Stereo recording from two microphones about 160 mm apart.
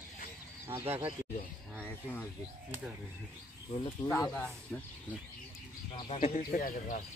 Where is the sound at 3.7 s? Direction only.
35° left (ahead or behind).